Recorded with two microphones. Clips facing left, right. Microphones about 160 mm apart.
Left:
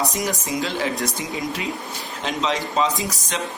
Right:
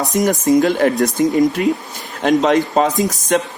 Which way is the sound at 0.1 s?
50° right (ahead or behind).